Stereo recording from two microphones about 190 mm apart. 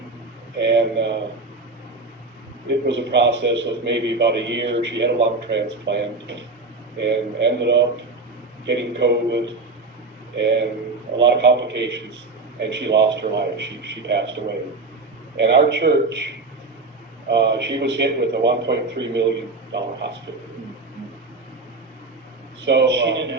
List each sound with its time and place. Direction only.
0.5 s a man's voice: 65° right (ahead or behind)
2.6 s a man's voice: 65° right (ahead or behind)
10.4 s a man's voice: 65° right (ahead or behind)
17.2 s a man's voice: 65° right (ahead or behind)
22.6 s a man's voice: 65° right (ahead or behind)